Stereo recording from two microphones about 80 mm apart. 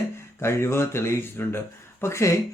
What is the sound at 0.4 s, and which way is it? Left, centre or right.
Speech, left.